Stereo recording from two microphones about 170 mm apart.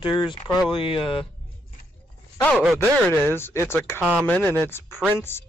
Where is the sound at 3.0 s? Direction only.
10° left (ahead or behind).